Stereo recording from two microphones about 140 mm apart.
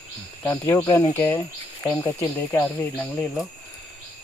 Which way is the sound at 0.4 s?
20° left (ahead or behind).